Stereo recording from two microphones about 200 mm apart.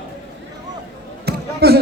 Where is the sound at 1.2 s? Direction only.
50° right (ahead or behind).